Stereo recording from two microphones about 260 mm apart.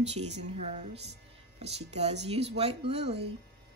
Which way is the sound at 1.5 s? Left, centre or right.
Right.